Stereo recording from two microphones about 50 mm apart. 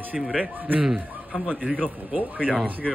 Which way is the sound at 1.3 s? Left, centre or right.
Centre.